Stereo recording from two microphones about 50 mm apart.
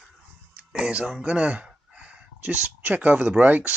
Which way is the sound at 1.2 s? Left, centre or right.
Right.